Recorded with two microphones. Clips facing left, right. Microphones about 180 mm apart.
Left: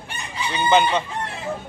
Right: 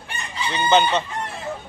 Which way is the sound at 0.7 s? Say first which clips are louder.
Even; 10° left (ahead or behind).